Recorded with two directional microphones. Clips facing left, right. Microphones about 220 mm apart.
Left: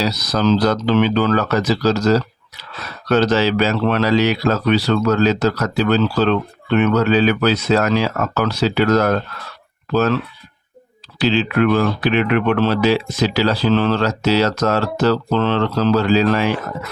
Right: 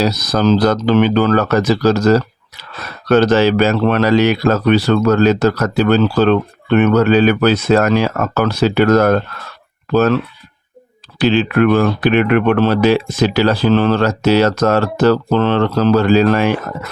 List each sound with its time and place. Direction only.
0.0 s speech: 50° right (ahead or behind)
11.2 s speech: 50° right (ahead or behind)